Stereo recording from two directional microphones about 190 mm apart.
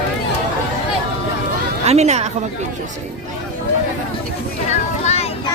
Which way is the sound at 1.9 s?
35° right (ahead or behind).